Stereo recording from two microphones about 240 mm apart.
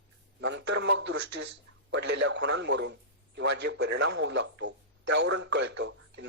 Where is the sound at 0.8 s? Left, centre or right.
Right.